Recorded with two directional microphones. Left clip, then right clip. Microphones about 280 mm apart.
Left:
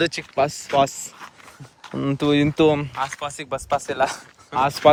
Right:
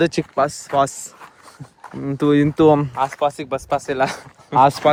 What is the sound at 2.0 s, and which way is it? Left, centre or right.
Speech, centre.